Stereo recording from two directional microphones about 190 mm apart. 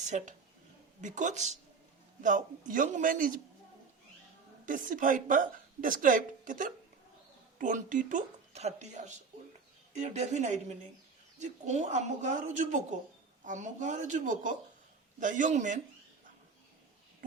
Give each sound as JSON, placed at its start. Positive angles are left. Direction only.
{"t": 0.0, "sound": "a woman's voice", "side_deg": -40}
{"t": 4.6, "sound": "a woman's voice", "side_deg": -45}